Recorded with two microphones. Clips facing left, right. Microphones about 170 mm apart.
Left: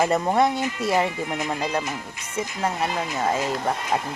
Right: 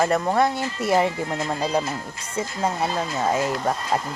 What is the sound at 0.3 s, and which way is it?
Speech, 15° left (ahead or behind).